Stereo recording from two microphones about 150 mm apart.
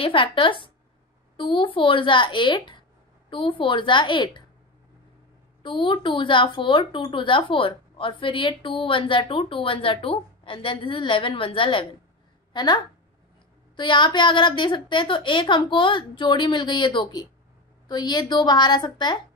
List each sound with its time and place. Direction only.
0.0 s speech: 35° left (ahead or behind)
5.6 s a woman's voice: 35° left (ahead or behind)